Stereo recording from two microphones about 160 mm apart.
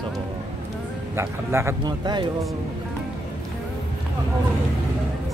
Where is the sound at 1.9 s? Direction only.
25° right (ahead or behind).